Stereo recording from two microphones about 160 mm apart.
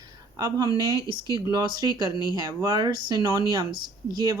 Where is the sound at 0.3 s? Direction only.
25° right (ahead or behind).